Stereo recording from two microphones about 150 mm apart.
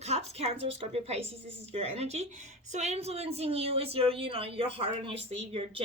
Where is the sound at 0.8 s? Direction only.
45° right (ahead or behind).